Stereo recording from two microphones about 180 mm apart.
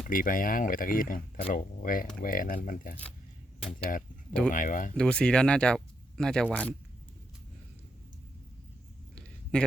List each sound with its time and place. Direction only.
0.0 s speech: 50° left (ahead or behind)
3.6 s speech: 5° left (ahead or behind)
3.8 s speech: 50° left (ahead or behind)
4.9 s speech: 5° left (ahead or behind)
9.1 s a sound: 5° left (ahead or behind)